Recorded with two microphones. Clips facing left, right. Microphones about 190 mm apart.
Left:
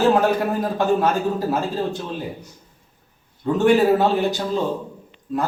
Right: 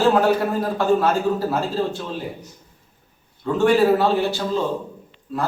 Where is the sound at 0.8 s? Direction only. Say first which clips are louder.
Right 1 dB; 15° left (ahead or behind).